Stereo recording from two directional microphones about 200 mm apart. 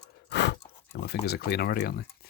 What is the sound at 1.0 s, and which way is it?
Speech, 55° left (ahead or behind).